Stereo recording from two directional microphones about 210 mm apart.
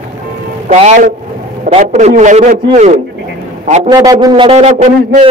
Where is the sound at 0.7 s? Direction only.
35° right (ahead or behind).